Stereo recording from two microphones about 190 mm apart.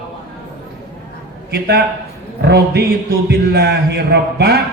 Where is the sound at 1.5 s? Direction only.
60° right (ahead or behind).